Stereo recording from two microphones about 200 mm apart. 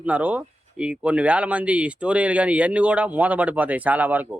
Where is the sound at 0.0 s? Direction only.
5° right (ahead or behind).